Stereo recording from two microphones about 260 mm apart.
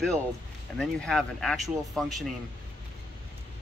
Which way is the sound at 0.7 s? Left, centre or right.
Centre.